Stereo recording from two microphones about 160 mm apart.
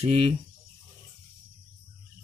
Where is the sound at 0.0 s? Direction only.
40° right (ahead or behind).